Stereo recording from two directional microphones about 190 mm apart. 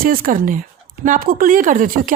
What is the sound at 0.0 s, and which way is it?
A woman's voice, 50° right (ahead or behind).